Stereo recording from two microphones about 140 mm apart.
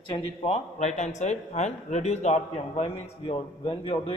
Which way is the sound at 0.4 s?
55° left (ahead or behind).